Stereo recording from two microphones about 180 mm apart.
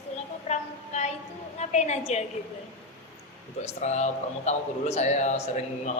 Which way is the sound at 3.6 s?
40° left (ahead or behind).